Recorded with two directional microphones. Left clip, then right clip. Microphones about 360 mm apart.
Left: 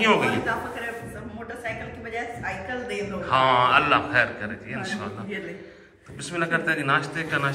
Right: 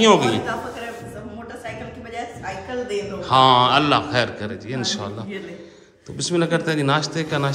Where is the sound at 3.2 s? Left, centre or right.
Centre.